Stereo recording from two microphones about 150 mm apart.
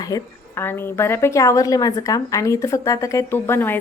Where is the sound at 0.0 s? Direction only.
20° left (ahead or behind).